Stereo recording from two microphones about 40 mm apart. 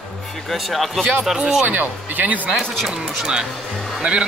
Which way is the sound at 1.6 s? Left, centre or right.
Right.